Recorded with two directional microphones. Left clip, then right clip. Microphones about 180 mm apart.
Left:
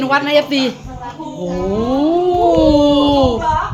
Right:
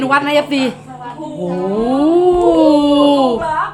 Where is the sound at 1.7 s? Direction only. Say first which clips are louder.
Right 2 dB; 15° right (ahead or behind).